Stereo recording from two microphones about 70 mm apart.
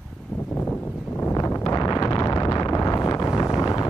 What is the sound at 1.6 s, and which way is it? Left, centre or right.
Wind noise, left.